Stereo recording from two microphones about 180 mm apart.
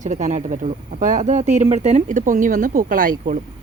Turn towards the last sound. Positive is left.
turn(degrees=-50)  # may be behind; listen again after turning